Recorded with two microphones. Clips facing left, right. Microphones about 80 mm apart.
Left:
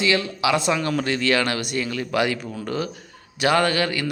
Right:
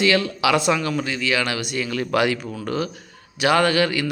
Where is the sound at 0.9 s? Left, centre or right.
Left.